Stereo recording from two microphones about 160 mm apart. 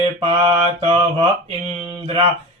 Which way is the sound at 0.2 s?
35° right (ahead or behind).